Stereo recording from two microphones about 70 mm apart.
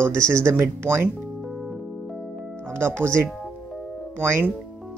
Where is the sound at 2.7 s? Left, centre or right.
Right.